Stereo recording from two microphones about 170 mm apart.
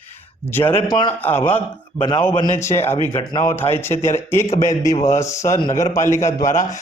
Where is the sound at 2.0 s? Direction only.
25° left (ahead or behind).